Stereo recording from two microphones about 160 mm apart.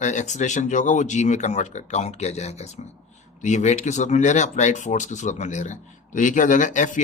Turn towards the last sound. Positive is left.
turn(degrees=50)  # may be behind; listen again after turning